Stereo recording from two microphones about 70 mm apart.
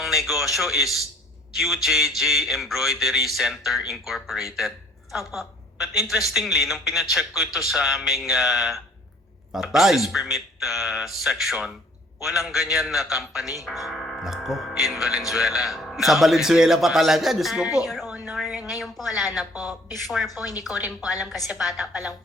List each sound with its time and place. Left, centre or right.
0.0 s a man's voice: centre
17.8 s speech: centre
18.3 s a sound: centre
18.7 s speech: centre
19.5 s a woman's voice: left
20.0 s speech: centre
20.3 s a woman's voice: left